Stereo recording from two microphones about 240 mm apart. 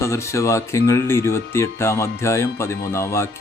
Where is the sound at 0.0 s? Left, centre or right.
Centre.